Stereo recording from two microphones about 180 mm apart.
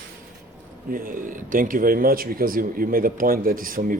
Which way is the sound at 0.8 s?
50° right (ahead or behind).